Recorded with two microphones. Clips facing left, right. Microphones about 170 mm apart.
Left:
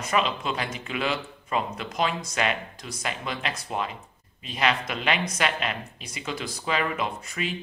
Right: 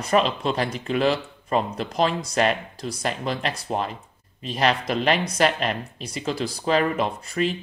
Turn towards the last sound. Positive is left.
turn(degrees=-35)  # may be behind; listen again after turning